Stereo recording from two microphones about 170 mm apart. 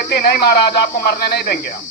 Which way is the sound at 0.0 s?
60° left (ahead or behind).